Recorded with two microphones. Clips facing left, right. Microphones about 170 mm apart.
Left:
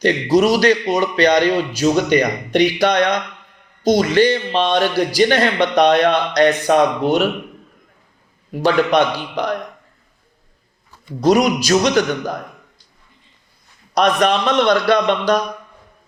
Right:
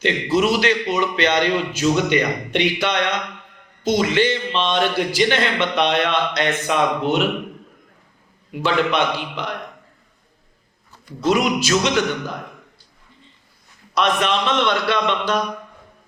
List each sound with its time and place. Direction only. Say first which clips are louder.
0.0 s a man's voice: left 4 dB; 40° left (ahead or behind)
8.5 s a man's voice: left 5 dB; 40° left (ahead or behind)
11.2 s a man's voice: left 4 dB; 40° left (ahead or behind)
13.9 s a man's voice: left 4 dB; 40° left (ahead or behind)